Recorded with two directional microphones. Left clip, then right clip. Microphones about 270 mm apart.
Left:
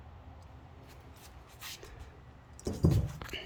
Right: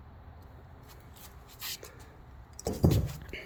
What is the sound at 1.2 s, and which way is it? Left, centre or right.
Shuffle, right.